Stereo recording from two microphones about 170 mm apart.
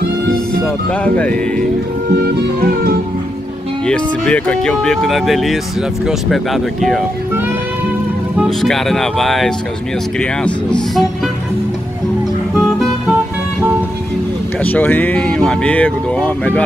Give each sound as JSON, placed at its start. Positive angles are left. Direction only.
{"t": 1.0, "sound": "speech", "side_deg": 10}
{"t": 2.6, "sound": "music", "side_deg": -65}
{"t": 3.8, "sound": "speech", "side_deg": 5}
{"t": 8.4, "sound": "speech", "side_deg": 0}
{"t": 12.5, "sound": "music", "side_deg": 0}
{"t": 14.6, "sound": "speech", "side_deg": 10}